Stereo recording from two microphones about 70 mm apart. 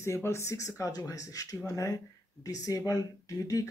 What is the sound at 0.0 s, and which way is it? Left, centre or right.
Speech, left.